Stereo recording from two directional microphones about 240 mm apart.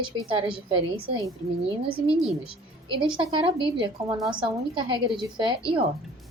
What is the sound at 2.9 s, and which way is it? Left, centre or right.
A woman's voice, centre.